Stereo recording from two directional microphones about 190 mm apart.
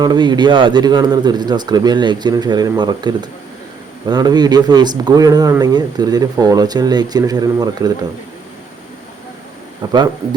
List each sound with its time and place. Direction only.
0.0 s speech: 20° right (ahead or behind)
9.8 s speech: 25° right (ahead or behind)